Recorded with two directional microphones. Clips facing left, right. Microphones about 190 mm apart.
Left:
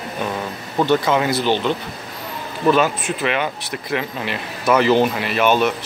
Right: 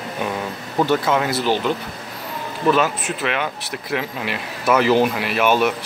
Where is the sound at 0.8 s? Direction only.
5° right (ahead or behind).